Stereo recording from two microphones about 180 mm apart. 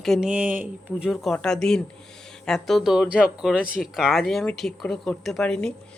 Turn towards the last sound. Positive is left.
turn(degrees=5)  # may be behind; listen again after turning